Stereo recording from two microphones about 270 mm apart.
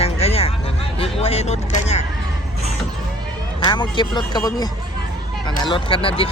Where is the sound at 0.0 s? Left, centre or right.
Left.